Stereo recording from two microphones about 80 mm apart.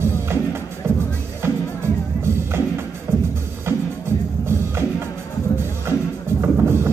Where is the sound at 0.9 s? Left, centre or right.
Right.